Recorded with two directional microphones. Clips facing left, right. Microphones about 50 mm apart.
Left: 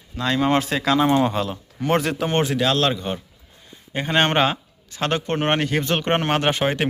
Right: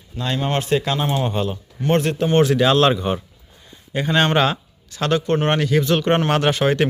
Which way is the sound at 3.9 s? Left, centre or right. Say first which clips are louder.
Right 2 dB; left.